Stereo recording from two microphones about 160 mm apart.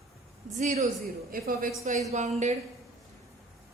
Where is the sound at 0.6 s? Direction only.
50° right (ahead or behind).